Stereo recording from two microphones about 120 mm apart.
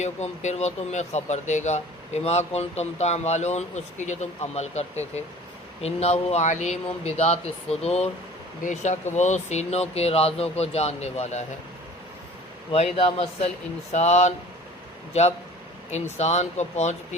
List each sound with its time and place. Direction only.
0.0 s speech: 70° left (ahead or behind)
8.6 s speech: 80° left
12.7 s speech: 55° left (ahead or behind)
13.9 s speech: 70° left (ahead or behind)
16.1 s speech: 70° left (ahead or behind)